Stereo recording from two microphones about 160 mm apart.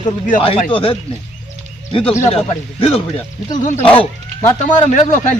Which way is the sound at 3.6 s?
50° left (ahead or behind).